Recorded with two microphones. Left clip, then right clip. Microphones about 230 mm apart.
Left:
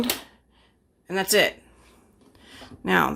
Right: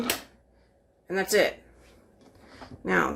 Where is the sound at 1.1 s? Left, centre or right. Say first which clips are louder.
Left 3 dB; left.